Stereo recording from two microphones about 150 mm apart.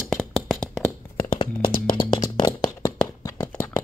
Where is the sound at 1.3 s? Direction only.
35° left (ahead or behind).